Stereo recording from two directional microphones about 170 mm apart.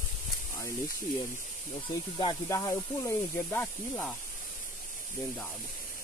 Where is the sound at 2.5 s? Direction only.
20° left (ahead or behind).